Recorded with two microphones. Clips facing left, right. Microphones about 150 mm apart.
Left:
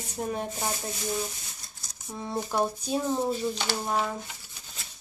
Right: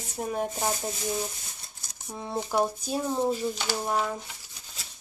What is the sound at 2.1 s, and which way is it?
Speech, 15° right (ahead or behind).